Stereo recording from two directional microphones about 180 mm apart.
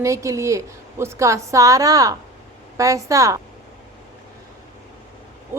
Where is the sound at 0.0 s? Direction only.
15° right (ahead or behind).